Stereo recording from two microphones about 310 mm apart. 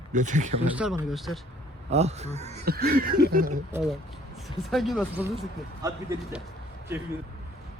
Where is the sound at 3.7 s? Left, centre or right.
Centre.